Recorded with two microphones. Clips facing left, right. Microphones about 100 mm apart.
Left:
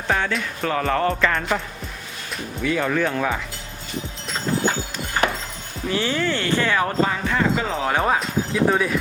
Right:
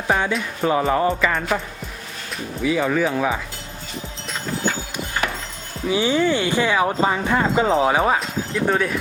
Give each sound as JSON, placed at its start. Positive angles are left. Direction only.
{"t": 0.1, "sound": "speech", "side_deg": -15}
{"t": 5.9, "sound": "speech", "side_deg": -15}
{"t": 7.9, "sound": "speech", "side_deg": -5}